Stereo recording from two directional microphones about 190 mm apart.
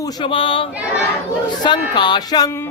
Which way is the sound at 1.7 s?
25° left (ahead or behind).